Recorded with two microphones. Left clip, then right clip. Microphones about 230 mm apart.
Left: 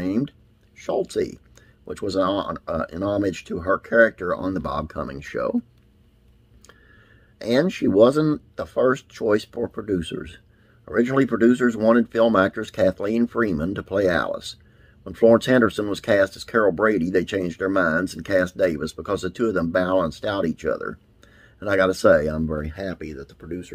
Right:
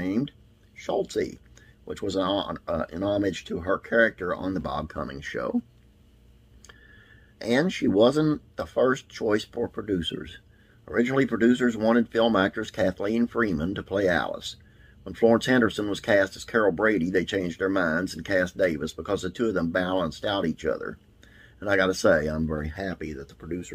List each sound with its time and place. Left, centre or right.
0.0 s a sound: centre
0.7 s speech: centre
7.3 s speech: centre